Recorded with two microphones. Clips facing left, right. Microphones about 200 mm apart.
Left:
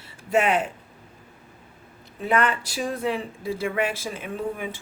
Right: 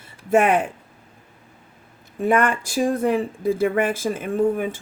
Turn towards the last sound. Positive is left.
turn(degrees=-50)  # may be behind; listen again after turning